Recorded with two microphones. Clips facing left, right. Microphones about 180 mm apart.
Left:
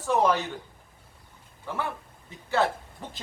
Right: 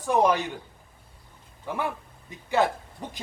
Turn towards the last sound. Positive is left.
turn(degrees=-15)  # may be behind; listen again after turning